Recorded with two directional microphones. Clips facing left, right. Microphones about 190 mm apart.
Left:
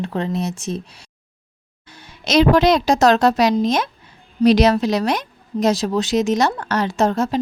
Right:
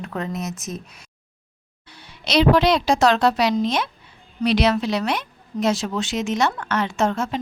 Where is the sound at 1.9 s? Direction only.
45° left (ahead or behind).